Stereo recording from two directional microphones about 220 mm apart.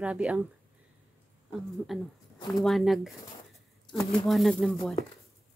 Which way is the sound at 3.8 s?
20° left (ahead or behind).